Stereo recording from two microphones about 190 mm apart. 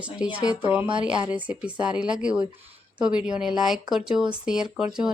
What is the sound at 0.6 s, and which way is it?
Speech, 10° right (ahead or behind).